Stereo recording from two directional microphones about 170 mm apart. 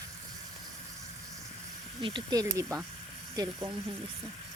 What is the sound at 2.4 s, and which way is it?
Speech, 20° right (ahead or behind).